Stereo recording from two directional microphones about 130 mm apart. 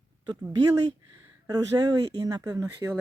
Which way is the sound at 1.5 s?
30° right (ahead or behind).